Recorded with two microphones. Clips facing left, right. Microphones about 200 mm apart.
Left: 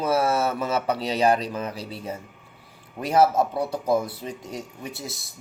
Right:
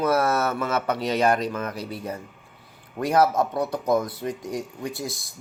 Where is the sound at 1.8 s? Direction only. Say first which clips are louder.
Right 2 dB; 30° left (ahead or behind).